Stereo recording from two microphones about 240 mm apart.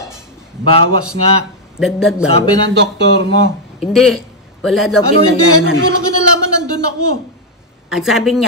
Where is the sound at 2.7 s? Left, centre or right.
Right.